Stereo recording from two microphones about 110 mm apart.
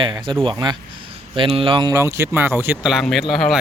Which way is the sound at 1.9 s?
25° right (ahead or behind).